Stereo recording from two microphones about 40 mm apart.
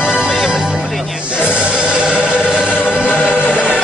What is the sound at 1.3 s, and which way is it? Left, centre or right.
Music, right.